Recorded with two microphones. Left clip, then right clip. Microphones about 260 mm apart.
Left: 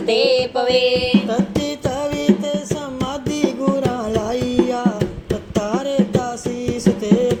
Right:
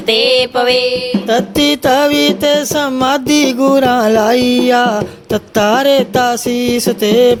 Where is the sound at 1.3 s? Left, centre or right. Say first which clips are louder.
Right 9 dB; right.